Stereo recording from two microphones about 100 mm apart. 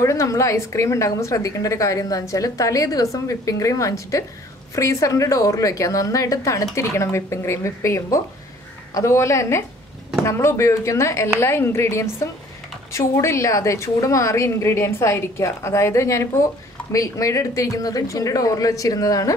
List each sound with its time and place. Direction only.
0.0 s a woman's voice: 35° left (ahead or behind)